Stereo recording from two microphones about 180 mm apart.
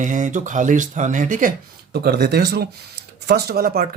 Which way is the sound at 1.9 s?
60° right (ahead or behind).